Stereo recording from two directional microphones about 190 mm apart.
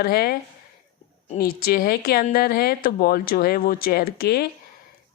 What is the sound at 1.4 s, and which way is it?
Speech, 50° left (ahead or behind).